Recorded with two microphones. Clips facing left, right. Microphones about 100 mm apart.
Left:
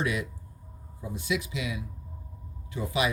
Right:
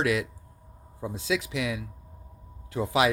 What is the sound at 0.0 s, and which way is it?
Speech, 90° right.